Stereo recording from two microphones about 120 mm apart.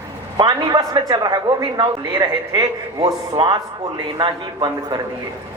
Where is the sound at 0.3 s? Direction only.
35° right (ahead or behind).